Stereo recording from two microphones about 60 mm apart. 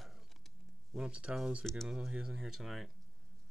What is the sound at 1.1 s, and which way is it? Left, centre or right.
Speech, centre.